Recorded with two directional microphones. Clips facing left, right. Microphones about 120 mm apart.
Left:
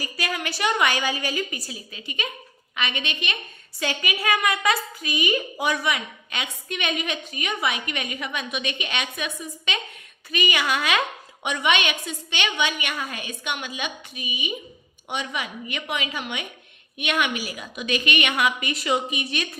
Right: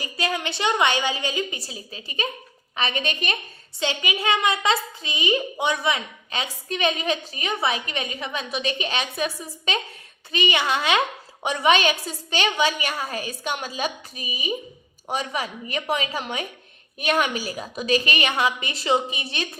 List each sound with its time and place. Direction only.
0.0 s a woman's voice: 25° right (ahead or behind); by 3.3 s 40° right (ahead or behind)
3.8 s a woman's voice: 25° right (ahead or behind)